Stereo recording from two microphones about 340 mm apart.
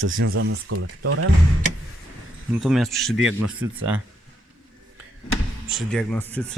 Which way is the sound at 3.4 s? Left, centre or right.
Right.